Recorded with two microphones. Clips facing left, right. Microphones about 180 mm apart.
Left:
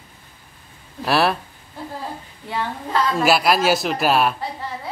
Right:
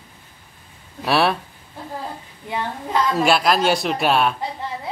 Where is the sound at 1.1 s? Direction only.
Centre (ahead or behind).